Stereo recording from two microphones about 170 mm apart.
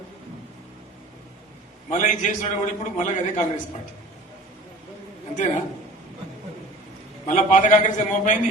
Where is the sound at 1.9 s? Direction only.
45° left (ahead or behind).